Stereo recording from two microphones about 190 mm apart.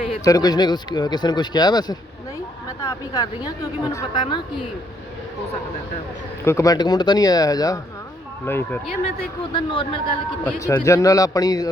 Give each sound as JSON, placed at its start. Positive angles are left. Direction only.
{"t": 0.3, "sound": "speech", "side_deg": 20}
{"t": 6.4, "sound": "a man's voice", "side_deg": 15}
{"t": 9.4, "sound": "speech", "side_deg": 25}
{"t": 10.6, "sound": "a man's voice", "side_deg": 15}